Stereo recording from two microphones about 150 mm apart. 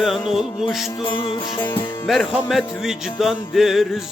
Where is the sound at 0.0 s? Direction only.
Centre (ahead or behind).